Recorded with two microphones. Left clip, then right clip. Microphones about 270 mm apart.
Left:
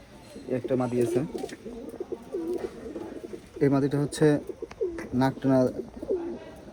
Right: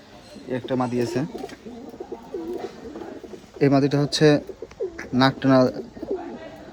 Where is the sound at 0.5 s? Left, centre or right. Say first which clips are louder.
Right 2 dB; right.